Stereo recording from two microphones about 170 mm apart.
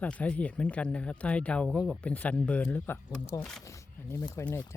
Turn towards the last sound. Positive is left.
turn(degrees=10)  # may be behind; listen again after turning